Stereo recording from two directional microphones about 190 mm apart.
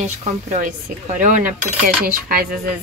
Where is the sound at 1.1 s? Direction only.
40° right (ahead or behind).